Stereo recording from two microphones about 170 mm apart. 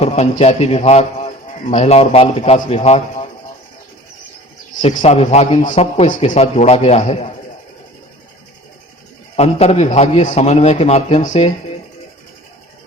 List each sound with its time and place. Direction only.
0.0 s a man's voice: 40° left (ahead or behind)
4.8 s a man's voice: 40° left (ahead or behind)
9.3 s a man's voice: 35° left (ahead or behind)